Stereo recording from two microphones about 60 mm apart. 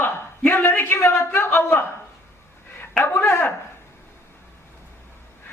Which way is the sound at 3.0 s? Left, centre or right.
Left.